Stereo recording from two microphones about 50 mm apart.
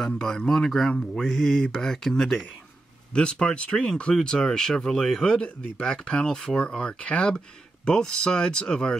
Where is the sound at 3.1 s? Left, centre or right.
Left.